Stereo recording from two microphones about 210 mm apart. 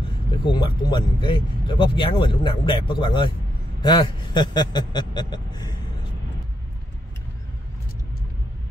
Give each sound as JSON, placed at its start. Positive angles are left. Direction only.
{"t": 0.3, "sound": "speech", "side_deg": 20}